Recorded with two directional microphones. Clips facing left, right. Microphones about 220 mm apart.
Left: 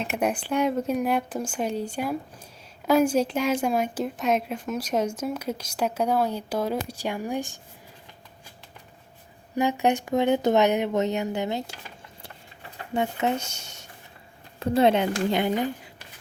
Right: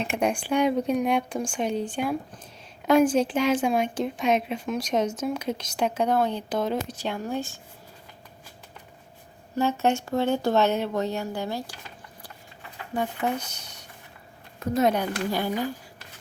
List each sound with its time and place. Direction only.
0.0 s speech: 5° left (ahead or behind)
9.6 s speech: 15° left (ahead or behind)
12.9 s a woman's voice: 25° left (ahead or behind)